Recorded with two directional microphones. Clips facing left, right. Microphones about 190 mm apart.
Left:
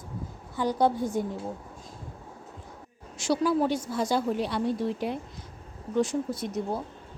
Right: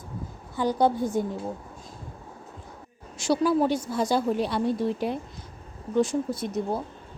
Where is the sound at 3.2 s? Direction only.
35° right (ahead or behind).